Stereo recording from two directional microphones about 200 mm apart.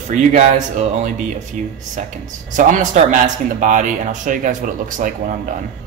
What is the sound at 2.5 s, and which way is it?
Speech, 40° right (ahead or behind).